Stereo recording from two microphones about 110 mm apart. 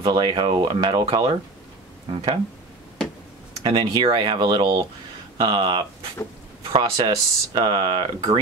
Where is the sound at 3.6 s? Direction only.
45° right (ahead or behind).